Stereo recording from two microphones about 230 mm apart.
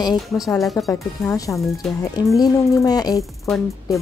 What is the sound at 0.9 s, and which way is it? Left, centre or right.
Speech, centre.